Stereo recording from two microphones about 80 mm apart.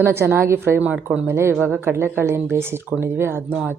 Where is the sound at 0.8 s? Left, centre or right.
Centre.